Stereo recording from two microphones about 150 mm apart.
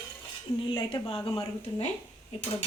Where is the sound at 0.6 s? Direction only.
35° left (ahead or behind).